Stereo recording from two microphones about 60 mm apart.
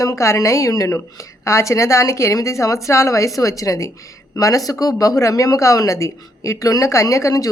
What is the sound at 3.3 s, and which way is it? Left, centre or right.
Speech, left.